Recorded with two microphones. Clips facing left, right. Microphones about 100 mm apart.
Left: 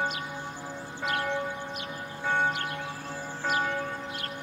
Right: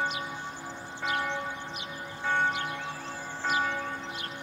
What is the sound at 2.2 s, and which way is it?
Music, 10° left (ahead or behind).